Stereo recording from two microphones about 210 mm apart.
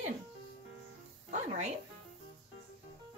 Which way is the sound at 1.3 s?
35° right (ahead or behind).